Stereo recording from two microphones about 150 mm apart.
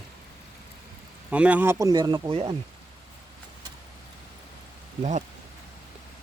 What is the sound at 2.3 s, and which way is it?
Speech, 40° right (ahead or behind).